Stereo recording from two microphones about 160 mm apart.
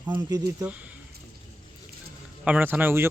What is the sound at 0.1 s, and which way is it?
Speech, 25° right (ahead or behind).